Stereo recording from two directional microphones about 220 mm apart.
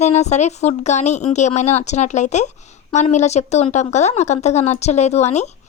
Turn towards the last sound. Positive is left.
turn(degrees=30)  # may be behind; listen again after turning